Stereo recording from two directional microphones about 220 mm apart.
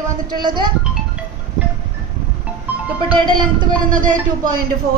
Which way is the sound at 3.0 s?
20° right (ahead or behind).